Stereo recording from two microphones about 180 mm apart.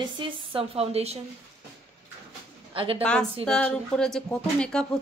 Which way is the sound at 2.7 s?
30° right (ahead or behind).